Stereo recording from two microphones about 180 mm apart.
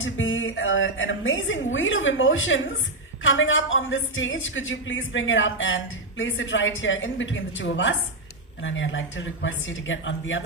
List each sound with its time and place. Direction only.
0.0 s a woman's voice: 90° left